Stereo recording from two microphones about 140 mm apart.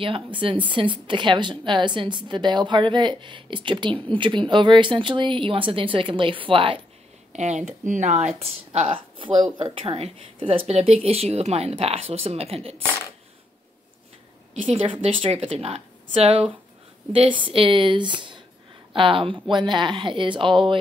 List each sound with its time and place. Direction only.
0.0 s a woman's voice: 40° right (ahead or behind)
7.3 s speech: 55° right (ahead or behind)
14.7 s a woman's voice: 40° right (ahead or behind)